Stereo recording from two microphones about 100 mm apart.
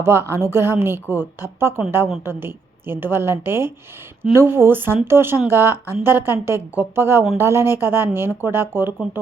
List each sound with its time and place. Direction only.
0.0 s a woman's voice: 25° right (ahead or behind)